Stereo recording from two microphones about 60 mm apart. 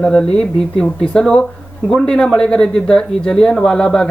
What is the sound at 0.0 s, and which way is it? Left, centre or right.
Speech, centre.